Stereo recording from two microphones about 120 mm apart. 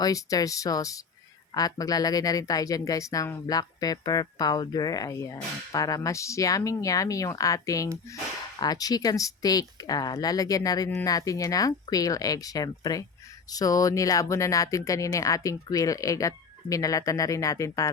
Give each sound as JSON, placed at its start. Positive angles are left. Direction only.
{"t": 0.0, "sound": "speech", "side_deg": 30}